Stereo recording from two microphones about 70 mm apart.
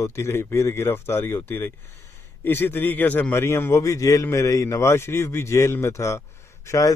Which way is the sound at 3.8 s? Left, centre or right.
Left.